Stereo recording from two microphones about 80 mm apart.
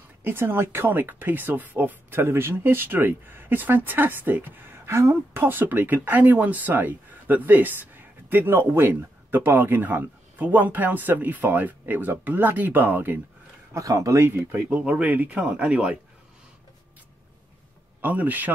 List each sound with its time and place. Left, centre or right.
0.2 s speech: right
13.7 s speech: right
14.3 s speech: right
18.0 s speech: right